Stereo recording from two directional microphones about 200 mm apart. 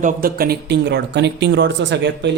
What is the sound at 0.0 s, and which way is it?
Speech, 45° right (ahead or behind).